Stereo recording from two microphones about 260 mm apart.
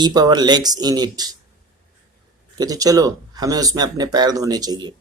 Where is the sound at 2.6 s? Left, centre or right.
Centre.